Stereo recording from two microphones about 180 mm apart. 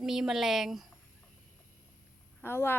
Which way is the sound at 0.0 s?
5° right (ahead or behind).